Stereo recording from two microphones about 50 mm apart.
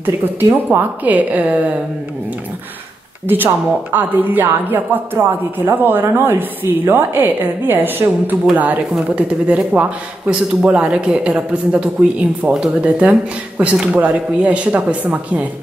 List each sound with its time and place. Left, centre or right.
0.0 s a woman's voice: right
3.3 s a woman's voice: right